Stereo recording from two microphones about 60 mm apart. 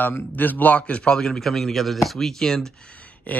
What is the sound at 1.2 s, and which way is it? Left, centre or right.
Speech, centre.